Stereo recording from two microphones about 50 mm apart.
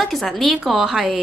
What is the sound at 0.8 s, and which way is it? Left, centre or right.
Speech, centre.